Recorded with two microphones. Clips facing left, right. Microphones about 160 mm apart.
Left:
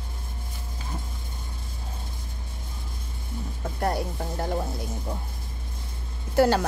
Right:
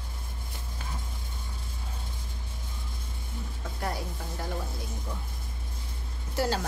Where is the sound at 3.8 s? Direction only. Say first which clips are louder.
Left 7 dB; 45° left (ahead or behind).